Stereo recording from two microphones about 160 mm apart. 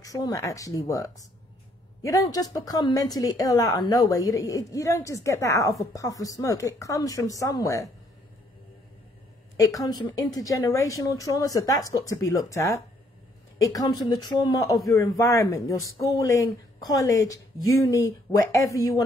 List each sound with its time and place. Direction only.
0.0 s a woman's voice: 20° left (ahead or behind)
9.6 s a woman's voice: 20° left (ahead or behind)